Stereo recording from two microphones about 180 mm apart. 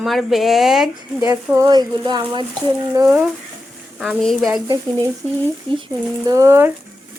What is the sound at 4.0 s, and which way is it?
Speech, centre (ahead or behind).